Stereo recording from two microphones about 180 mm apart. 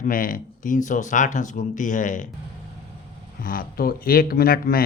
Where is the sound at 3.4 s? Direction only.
50° left (ahead or behind).